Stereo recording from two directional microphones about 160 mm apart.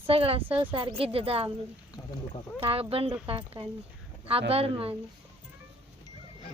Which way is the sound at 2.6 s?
35° right (ahead or behind).